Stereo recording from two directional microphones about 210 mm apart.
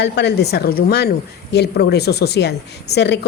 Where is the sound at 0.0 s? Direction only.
55° left (ahead or behind).